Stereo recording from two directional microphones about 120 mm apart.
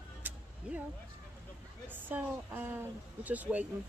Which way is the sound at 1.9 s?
15° right (ahead or behind).